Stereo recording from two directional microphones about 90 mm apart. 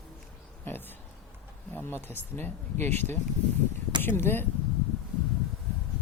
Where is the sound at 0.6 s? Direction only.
25° left (ahead or behind).